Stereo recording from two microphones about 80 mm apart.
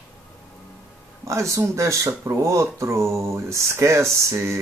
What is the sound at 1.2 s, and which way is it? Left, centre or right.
Speech, right.